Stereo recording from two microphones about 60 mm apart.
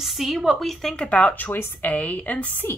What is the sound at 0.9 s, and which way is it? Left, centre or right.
Speech, left.